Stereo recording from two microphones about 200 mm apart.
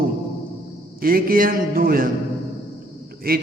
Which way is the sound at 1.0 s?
45° right (ahead or behind).